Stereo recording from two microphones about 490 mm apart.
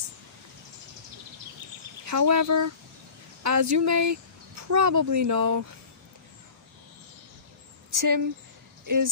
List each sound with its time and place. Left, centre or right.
2.0 s speech: right
7.9 s speech: right